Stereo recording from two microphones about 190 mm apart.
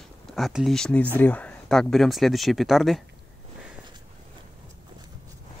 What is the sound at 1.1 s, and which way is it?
Speech, 10° left (ahead or behind).